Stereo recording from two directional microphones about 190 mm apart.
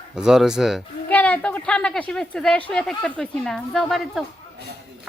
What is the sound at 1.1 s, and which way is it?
Speech, 10° left (ahead or behind).